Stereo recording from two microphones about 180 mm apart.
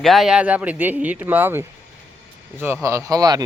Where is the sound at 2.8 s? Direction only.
15° right (ahead or behind).